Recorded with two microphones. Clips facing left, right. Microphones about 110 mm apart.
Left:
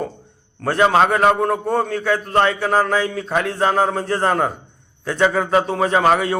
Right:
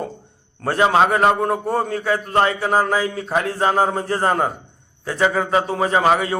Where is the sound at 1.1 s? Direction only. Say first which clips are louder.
Left 1 dB; 30° right (ahead or behind).